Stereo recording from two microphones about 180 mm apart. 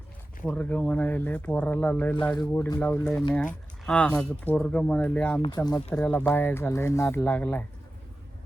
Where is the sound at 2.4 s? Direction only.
20° left (ahead or behind).